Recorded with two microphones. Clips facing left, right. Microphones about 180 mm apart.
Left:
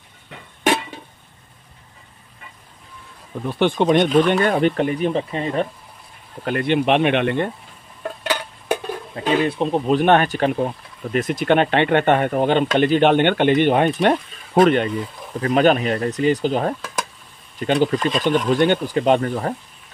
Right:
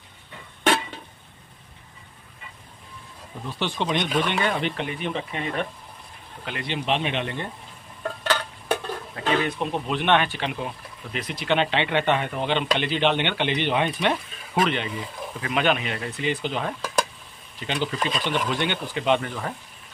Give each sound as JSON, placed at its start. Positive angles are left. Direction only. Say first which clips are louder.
{"t": 3.4, "sound": "speech", "louder": "left 10 dB", "side_deg": 55}
{"t": 6.4, "sound": "speech", "louder": "left 11 dB", "side_deg": 50}
{"t": 8.2, "sound": "a sound", "louder": "left 1 dB", "side_deg": 15}
{"t": 9.2, "sound": "speech", "louder": "left 5 dB", "side_deg": 15}
{"t": 9.5, "sound": "speech", "louder": "left 8 dB", "side_deg": 35}